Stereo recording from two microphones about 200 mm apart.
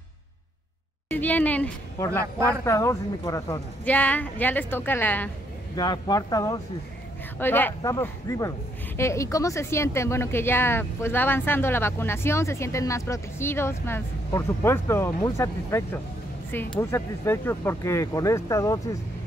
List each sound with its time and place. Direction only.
1.1 s speech: 10° left (ahead or behind)
5.8 s speech: 20° left (ahead or behind)